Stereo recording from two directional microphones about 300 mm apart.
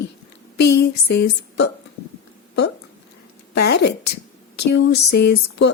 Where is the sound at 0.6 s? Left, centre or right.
Left.